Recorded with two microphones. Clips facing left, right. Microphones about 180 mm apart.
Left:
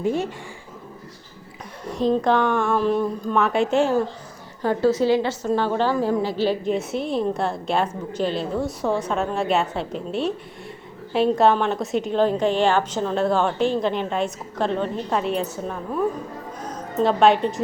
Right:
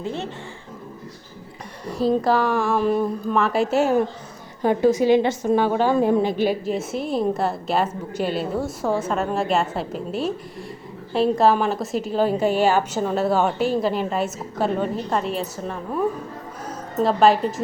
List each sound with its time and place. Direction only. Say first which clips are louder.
0.0 s a woman's voice: left 6 dB; 15° left (ahead or behind)
1.9 s a woman's voice: even; 5° right (ahead or behind)
4.6 s a woman's voice: right 2 dB; 15° right (ahead or behind)
6.7 s a woman's voice: left 1 dB; centre (ahead or behind)